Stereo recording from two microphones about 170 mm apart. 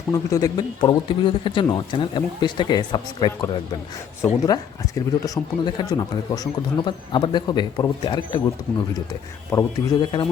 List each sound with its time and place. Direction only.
0.1 s speech: 20° left (ahead or behind)
9.5 s speech: 20° left (ahead or behind)